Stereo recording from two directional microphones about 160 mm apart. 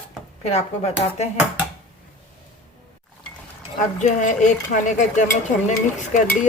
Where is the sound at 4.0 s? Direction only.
50° left (ahead or behind).